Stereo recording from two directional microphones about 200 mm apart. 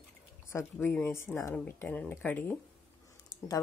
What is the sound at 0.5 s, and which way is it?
Speech, 10° left (ahead or behind).